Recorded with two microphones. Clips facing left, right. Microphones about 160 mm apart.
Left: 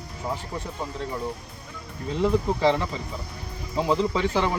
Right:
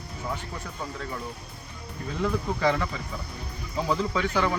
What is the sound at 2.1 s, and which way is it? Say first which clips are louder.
Speech: left 5 dB; 25° left (ahead or behind).